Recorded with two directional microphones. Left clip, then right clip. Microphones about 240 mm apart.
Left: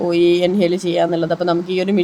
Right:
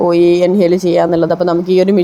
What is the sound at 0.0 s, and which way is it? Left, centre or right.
Speech, centre.